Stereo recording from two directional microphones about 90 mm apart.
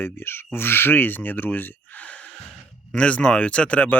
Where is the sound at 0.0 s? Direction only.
25° left (ahead or behind).